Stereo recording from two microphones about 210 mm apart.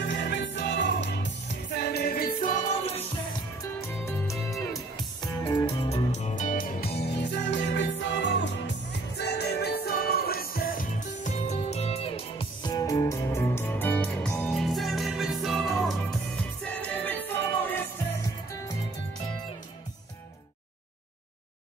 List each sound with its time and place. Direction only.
0.1 s music: 55° left (ahead or behind); by 3.0 s 40° left (ahead or behind)
4.9 s music: 20° left (ahead or behind)
5.9 s music: 35° left (ahead or behind); by 18.0 s 10° left (ahead or behind)